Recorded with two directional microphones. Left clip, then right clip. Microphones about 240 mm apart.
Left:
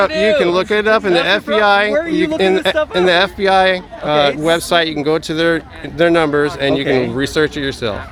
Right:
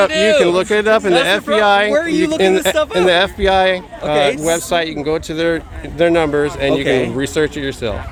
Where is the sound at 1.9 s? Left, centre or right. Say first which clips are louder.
Right 1 dB; right.